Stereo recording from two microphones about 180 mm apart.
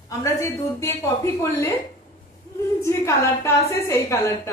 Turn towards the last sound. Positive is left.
turn(degrees=15)  # may be behind; listen again after turning